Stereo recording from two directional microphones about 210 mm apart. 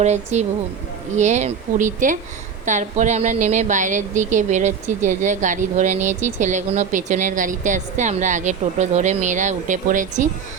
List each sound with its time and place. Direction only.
0.0 s speech: 35° right (ahead or behind)